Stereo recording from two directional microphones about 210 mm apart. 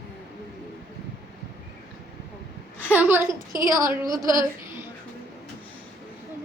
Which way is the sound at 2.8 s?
5° right (ahead or behind).